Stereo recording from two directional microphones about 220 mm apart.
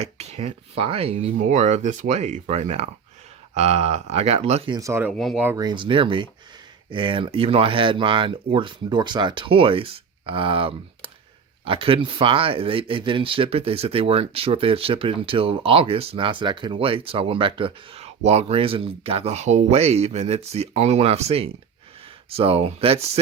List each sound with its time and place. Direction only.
0.0 s speech: 30° right (ahead or behind); by 5.1 s 10° right (ahead or behind)
5.1 s speech: centre (ahead or behind); by 23.2 s 25° right (ahead or behind)